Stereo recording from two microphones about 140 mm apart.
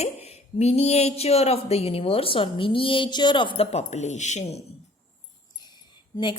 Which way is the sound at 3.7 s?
55° left (ahead or behind).